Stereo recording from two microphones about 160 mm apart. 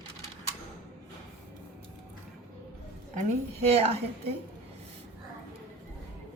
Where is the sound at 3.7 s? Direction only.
40° right (ahead or behind).